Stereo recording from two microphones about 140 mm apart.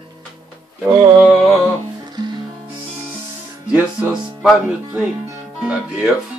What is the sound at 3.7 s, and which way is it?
Music, 5° right (ahead or behind).